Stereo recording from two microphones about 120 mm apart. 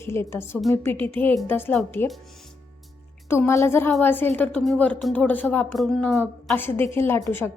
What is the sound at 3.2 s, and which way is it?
A woman's voice, 20° left (ahead or behind).